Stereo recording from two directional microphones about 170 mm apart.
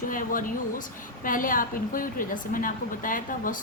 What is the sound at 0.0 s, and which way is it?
A woman's voice, 50° left (ahead or behind).